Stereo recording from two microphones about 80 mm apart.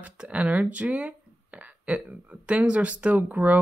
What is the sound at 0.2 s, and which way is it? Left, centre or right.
Speech, centre.